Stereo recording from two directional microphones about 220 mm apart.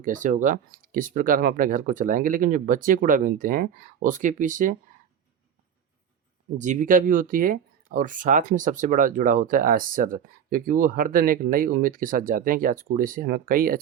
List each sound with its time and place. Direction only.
0.0 s speech: 35° right (ahead or behind)
6.6 s speech: 35° right (ahead or behind)